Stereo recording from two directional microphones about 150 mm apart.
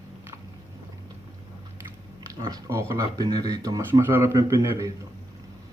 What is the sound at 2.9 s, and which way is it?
Speech, 25° right (ahead or behind).